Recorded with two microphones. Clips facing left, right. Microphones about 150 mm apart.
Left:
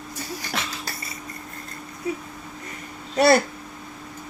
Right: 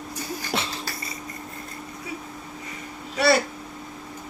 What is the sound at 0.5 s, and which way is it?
Wheeze, 20° right (ahead or behind).